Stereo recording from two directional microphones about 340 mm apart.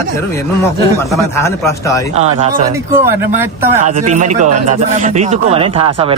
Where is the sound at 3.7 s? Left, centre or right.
Right.